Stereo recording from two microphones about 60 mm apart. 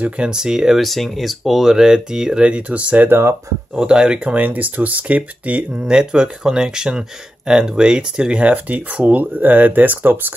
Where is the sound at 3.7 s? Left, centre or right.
Centre.